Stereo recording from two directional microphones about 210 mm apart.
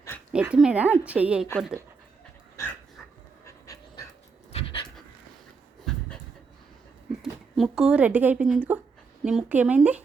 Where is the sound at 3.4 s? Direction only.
15° left (ahead or behind).